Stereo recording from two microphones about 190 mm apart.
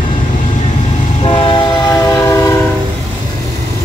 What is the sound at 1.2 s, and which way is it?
Train, 25° left (ahead or behind).